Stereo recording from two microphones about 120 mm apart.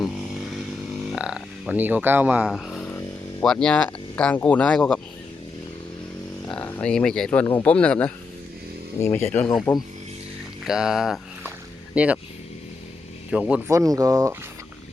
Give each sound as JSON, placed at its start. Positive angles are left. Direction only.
{"t": 1.1, "sound": "speech", "side_deg": -5}
{"t": 2.5, "sound": "speech", "side_deg": 0}
{"t": 6.7, "sound": "speech", "side_deg": 10}
{"t": 9.0, "sound": "speech", "side_deg": 20}
{"t": 10.7, "sound": "speech", "side_deg": -5}
{"t": 13.3, "sound": "speech", "side_deg": -10}
{"t": 13.7, "sound": "speech", "side_deg": -30}